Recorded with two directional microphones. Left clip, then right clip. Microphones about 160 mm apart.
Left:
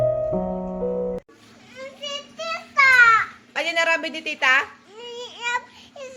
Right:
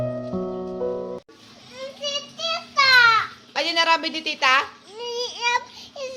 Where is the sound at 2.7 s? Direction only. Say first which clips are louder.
Left 1 dB; 10° right (ahead or behind).